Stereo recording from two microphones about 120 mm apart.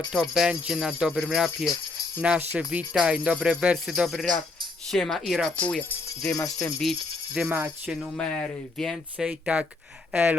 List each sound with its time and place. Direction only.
0.1 s speech: 5° right (ahead or behind)
5.5 s speech: 10° left (ahead or behind)
6.2 s speech: 30° left (ahead or behind)
7.3 s speech: 15° right (ahead or behind)
8.1 s speech: 10° left (ahead or behind)
9.1 s speech: 10° right (ahead or behind)